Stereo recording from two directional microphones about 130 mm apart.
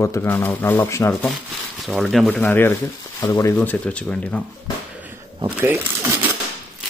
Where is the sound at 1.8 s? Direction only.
Centre (ahead or behind).